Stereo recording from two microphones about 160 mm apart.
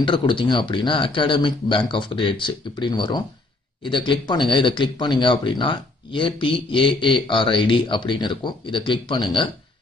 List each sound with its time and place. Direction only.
0.0 s speech: 30° left (ahead or behind)